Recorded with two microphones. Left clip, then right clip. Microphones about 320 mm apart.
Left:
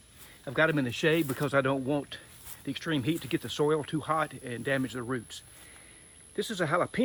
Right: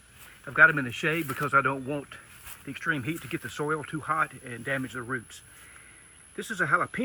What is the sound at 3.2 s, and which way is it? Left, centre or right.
Speech, left.